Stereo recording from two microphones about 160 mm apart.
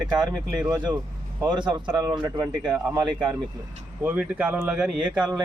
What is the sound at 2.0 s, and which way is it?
Speech, 25° right (ahead or behind).